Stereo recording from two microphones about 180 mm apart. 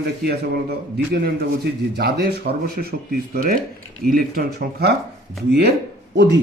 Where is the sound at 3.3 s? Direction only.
50° right (ahead or behind).